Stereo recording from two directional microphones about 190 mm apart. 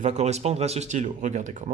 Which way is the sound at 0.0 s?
35° right (ahead or behind).